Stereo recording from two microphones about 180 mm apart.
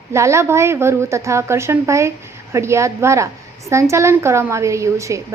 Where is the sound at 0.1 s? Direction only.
15° right (ahead or behind).